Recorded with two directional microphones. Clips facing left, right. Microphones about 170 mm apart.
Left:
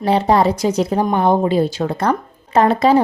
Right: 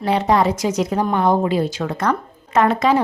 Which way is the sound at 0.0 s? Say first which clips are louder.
Left 2 dB; 30° left (ahead or behind).